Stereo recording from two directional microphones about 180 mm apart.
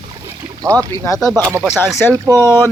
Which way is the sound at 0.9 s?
15° left (ahead or behind).